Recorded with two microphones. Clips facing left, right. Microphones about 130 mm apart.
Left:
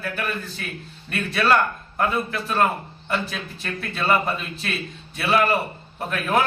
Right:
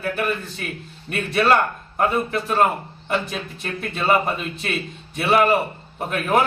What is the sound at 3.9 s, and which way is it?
A man's voice, 20° right (ahead or behind).